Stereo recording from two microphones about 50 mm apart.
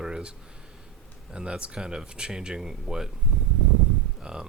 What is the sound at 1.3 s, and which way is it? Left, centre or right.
Speech, right.